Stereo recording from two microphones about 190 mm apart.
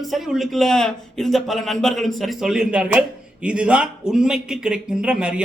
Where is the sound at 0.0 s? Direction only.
Centre (ahead or behind).